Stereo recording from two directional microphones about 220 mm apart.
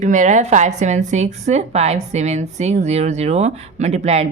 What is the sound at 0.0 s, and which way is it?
A woman's voice, 35° right (ahead or behind).